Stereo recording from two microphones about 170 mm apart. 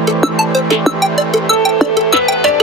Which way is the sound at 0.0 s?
Centre (ahead or behind).